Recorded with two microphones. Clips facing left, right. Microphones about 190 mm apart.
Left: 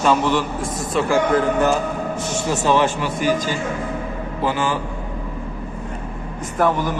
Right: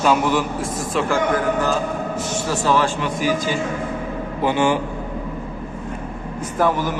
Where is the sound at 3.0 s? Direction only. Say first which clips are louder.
Even; 5° left (ahead or behind).